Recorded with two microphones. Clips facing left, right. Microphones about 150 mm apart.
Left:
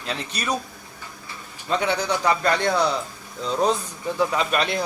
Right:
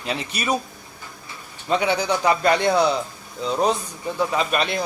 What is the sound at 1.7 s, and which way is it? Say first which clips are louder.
A man's voice: right 2 dB; 5° right (ahead or behind).